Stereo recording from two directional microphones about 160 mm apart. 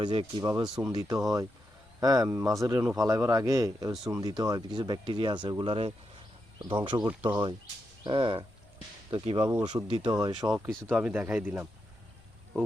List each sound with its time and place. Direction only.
0.0 s speech: 30° right (ahead or behind)
0.6 s speech: 10° right (ahead or behind)
0.9 s speech: 20° right (ahead or behind)
9.7 s speech: 15° right (ahead or behind)
10.5 s speech: centre (ahead or behind)